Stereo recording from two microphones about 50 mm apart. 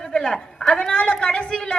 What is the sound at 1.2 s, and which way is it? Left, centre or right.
Speech, left.